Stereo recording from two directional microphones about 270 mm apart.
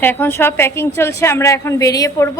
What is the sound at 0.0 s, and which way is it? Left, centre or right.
A woman's voice, centre.